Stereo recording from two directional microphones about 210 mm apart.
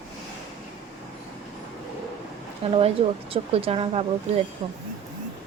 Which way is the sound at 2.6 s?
25° right (ahead or behind).